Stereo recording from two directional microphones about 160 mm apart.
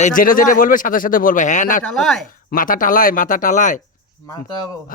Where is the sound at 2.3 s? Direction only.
60° left (ahead or behind).